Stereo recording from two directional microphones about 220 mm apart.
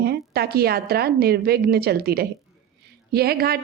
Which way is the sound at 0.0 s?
45° right (ahead or behind).